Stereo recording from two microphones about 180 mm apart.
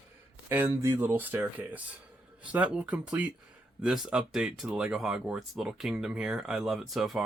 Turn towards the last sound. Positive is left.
turn(degrees=0)  # may be behind; listen again after turning